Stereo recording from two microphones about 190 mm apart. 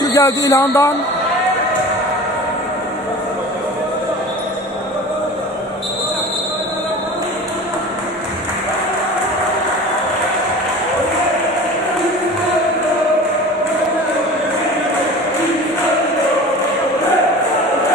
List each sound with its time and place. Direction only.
0.0 s speech: 20° left (ahead or behind)